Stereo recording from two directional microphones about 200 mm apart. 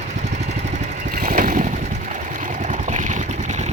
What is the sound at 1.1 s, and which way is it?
Vehicle, 45° right (ahead or behind).